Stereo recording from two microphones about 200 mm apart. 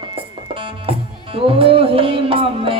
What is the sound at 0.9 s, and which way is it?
Music, 25° right (ahead or behind).